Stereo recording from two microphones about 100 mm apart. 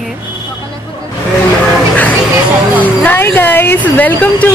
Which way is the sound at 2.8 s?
15° left (ahead or behind).